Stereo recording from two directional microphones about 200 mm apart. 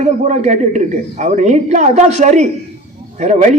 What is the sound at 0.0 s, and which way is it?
A woman's voice, 35° right (ahead or behind).